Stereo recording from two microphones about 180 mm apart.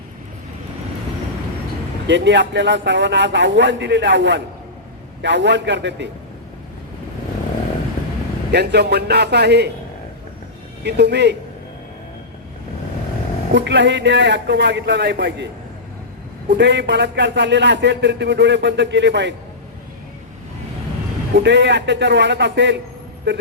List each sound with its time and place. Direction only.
2.0 s a man's voice: 85° right
8.5 s a man's voice: 65° right (ahead or behind)
10.8 s a man's voice: 70° right (ahead or behind)
13.5 s a man's voice: 75° right (ahead or behind)
16.5 s a man's voice: 75° right (ahead or behind)
21.3 s a man's voice: 75° right (ahead or behind)